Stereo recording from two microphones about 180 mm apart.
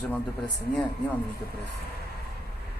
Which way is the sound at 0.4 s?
25° left (ahead or behind).